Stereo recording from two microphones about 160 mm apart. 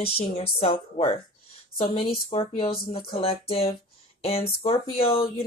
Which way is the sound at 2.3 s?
35° left (ahead or behind).